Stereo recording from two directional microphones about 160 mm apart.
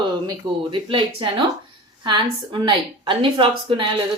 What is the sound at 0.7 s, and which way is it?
A woman's voice, 30° right (ahead or behind).